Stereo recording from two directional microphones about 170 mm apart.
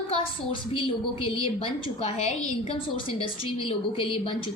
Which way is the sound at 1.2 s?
30° left (ahead or behind).